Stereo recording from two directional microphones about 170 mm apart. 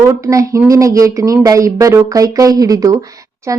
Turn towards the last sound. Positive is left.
turn(degrees=-20)  # may be behind; listen again after turning